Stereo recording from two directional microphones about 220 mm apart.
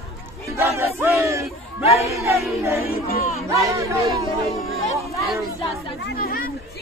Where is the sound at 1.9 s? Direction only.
15° right (ahead or behind).